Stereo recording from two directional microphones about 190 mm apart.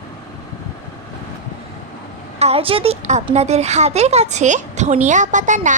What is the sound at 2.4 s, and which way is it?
Speech, 30° right (ahead or behind).